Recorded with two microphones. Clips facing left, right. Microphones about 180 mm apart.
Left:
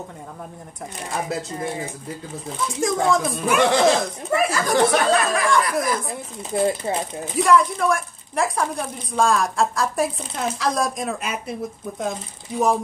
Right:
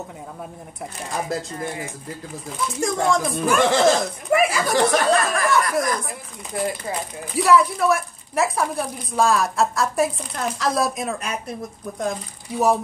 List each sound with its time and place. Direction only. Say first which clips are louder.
2.7 s a woman's voice: left 1 dB; centre (ahead or behind)
6.5 s speech: left 5 dB; 25° left (ahead or behind)
7.3 s a woman's voice: right 1 dB; 5° right (ahead or behind)